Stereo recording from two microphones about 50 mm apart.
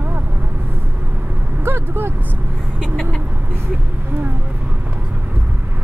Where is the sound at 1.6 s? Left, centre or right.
Right.